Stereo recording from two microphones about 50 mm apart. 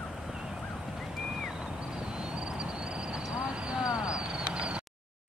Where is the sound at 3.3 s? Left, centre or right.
Centre.